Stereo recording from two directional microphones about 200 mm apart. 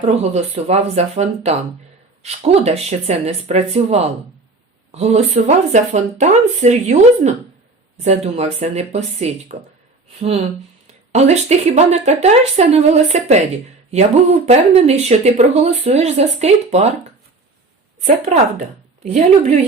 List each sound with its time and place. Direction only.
0.0 s speech: 35° right (ahead or behind)
14.4 s speech: 30° right (ahead or behind)
18.0 s speech: 35° right (ahead or behind)